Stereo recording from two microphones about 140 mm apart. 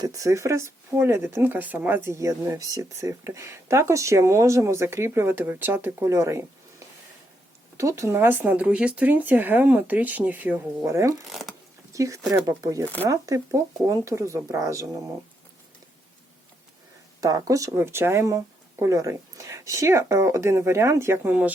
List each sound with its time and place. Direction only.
0.0 s speech: 25° right (ahead or behind)
7.8 s speech: 20° right (ahead or behind)
11.3 s shuffling cards: centre (ahead or behind)
11.9 s speech: 20° right (ahead or behind)
17.2 s speech: 25° right (ahead or behind)